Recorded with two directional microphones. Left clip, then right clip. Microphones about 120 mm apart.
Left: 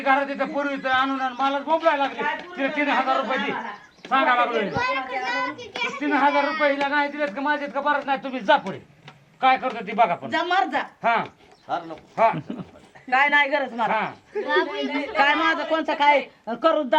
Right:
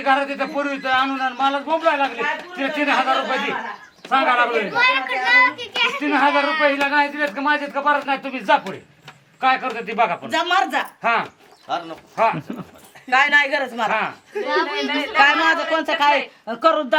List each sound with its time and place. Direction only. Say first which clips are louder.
0.0 s a man's voice: right 2 dB; 10° right (ahead or behind)
1.5 s a man's voice: right 1 dB; 20° right (ahead or behind)
4.7 s a child's voice: right 7 dB; 55° right (ahead or behind)
6.0 s speech: right 3 dB; 5° right (ahead or behind)
6.2 s a man's voice: right 3 dB; 50° right (ahead or behind)
6.8 s speech: right 4 dB; centre (ahead or behind)
10.2 s a child's voice: right 3 dB; 60° right (ahead or behind)
11.0 s a man's voice: right 1 dB; 5° right (ahead or behind)
12.1 s speech: right 1 dB; centre (ahead or behind)
13.1 s a man's voice: right 3 dB; 20° right (ahead or behind)
15.2 s a man's voice: right 4 dB; 15° right (ahead or behind)